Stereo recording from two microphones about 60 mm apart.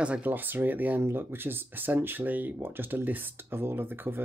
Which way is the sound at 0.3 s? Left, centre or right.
Right.